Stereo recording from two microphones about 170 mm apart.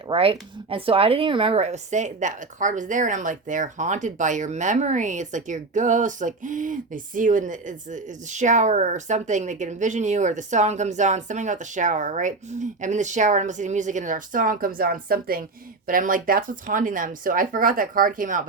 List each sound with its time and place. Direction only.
0.1 s speech: 30° right (ahead or behind); by 18.4 s 55° right (ahead or behind)